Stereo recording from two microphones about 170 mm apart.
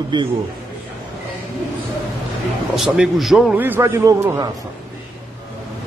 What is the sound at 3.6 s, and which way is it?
Speech, 15° right (ahead or behind).